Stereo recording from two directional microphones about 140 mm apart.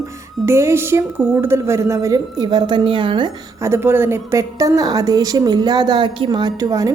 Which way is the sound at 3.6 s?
15° right (ahead or behind).